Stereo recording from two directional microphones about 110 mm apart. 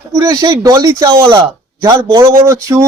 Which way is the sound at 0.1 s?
30° right (ahead or behind).